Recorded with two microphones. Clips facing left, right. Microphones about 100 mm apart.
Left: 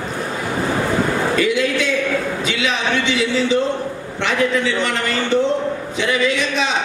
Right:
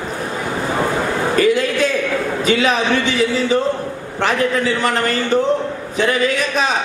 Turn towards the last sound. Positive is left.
turn(degrees=-45)  # may be behind; listen again after turning